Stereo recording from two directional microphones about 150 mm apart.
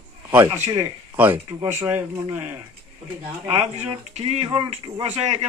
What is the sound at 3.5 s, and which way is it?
Speech, 45° right (ahead or behind).